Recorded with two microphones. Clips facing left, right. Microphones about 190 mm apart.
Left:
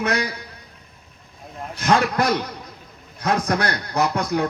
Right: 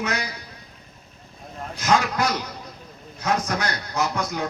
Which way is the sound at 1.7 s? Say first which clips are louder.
Left 2 dB; 60° left (ahead or behind).